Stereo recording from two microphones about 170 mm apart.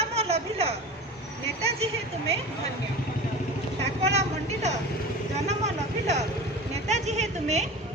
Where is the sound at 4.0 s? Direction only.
40° right (ahead or behind).